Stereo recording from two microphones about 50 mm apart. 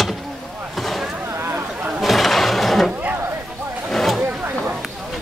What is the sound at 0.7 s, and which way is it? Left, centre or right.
Vehicle, centre.